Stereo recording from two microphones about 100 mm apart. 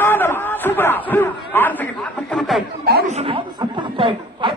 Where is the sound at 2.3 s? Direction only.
Centre (ahead or behind).